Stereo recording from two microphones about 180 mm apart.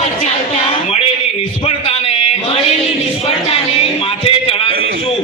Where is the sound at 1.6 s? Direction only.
30° left (ahead or behind).